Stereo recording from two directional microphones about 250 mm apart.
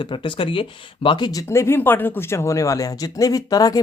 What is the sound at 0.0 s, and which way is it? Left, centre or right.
Speech, centre.